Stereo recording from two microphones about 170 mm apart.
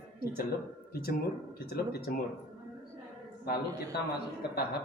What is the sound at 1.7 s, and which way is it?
Speech, 70° left (ahead or behind).